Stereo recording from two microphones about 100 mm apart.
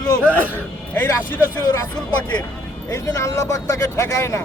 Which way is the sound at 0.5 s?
20° left (ahead or behind).